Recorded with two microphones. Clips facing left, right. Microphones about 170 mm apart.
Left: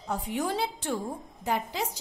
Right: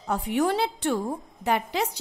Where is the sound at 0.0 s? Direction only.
70° right (ahead or behind).